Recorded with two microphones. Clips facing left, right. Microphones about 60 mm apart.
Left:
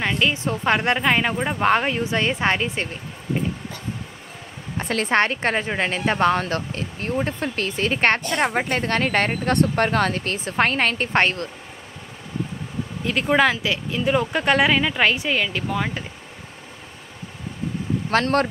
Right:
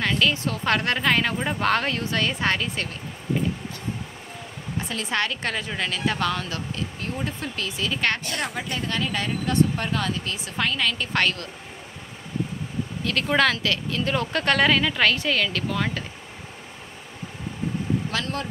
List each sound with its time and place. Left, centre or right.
0.0 s speech: left
4.7 s speech: left
13.0 s speech: centre
18.1 s speech: left